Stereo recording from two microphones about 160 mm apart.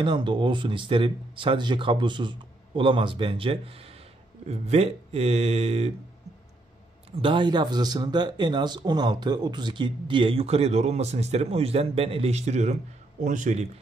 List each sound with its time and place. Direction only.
0.0 s speech: 30° right (ahead or behind)
7.2 s a man's voice: 30° right (ahead or behind); by 13.7 s 50° right (ahead or behind)